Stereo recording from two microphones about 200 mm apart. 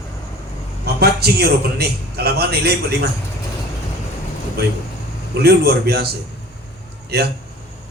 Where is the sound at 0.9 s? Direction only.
50° right (ahead or behind).